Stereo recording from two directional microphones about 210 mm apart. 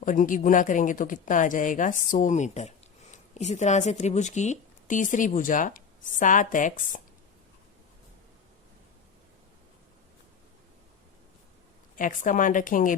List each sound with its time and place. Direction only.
0.0 s speech: 40° left (ahead or behind)
11.9 s speech: 40° left (ahead or behind)